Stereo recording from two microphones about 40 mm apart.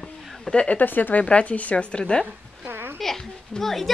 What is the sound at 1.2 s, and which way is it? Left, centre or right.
Speech, left.